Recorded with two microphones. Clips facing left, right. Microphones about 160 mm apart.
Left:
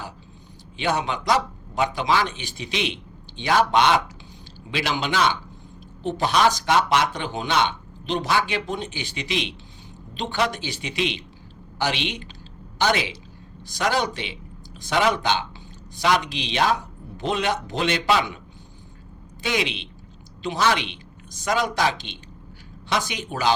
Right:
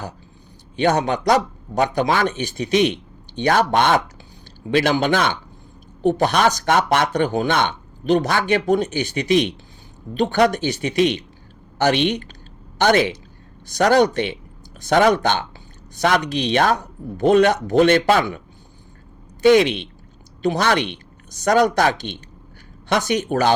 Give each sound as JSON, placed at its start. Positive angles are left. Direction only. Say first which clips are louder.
{"t": 0.9, "sound": "speech", "louder": "right 5 dB", "side_deg": -60}
{"t": 3.4, "sound": "speech", "louder": "right 2 dB", "side_deg": -50}